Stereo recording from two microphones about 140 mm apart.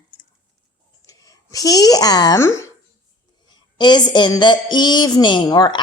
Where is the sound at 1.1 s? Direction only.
25° left (ahead or behind).